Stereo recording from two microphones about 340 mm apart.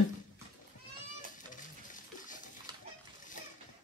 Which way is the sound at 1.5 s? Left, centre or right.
Left.